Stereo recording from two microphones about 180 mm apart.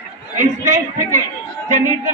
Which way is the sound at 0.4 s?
45° right (ahead or behind).